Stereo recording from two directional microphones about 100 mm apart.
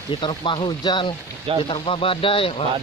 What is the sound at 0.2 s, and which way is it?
Speech, 55° left (ahead or behind).